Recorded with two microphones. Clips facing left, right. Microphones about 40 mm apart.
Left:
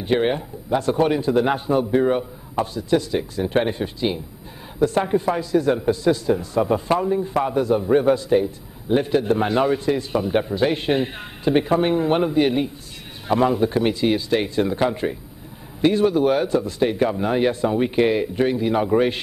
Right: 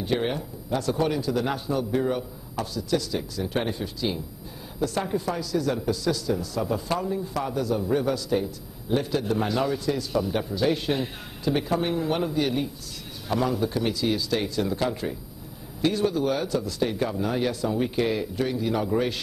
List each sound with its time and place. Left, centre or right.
0.0 s a man's voice: left